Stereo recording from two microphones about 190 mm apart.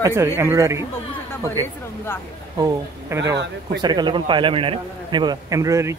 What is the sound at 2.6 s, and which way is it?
A man's voice, 15° right (ahead or behind).